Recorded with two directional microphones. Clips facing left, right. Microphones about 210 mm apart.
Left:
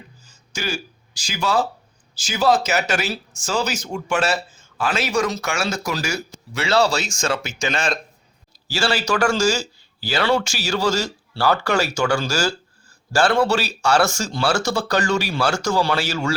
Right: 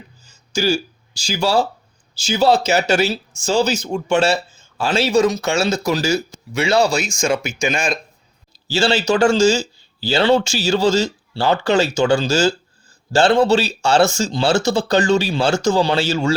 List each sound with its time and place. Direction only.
0.5 s speech: 30° right (ahead or behind); by 7.9 s 10° right (ahead or behind)
8.6 s speech: 25° right (ahead or behind)